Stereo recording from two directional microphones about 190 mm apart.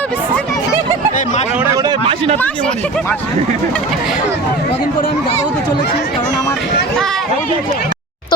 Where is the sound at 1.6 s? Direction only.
20° right (ahead or behind).